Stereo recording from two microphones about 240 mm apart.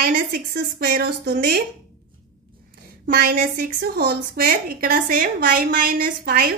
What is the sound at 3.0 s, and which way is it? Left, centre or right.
A woman's voice, right.